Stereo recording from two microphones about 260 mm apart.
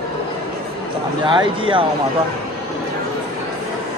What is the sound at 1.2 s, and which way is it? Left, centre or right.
Speech, centre.